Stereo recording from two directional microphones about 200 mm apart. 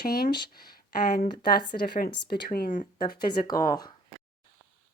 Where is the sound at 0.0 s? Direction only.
50° left (ahead or behind).